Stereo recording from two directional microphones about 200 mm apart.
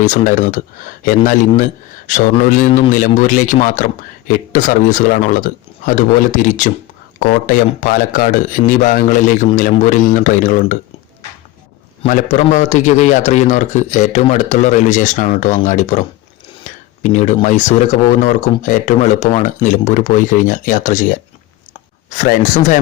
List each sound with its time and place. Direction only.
0.0 s a man's voice: 40° left (ahead or behind)
12.0 s a man's voice: 35° left (ahead or behind)
16.6 s a sound: 40° left (ahead or behind)
17.4 s a man's voice: 35° left (ahead or behind)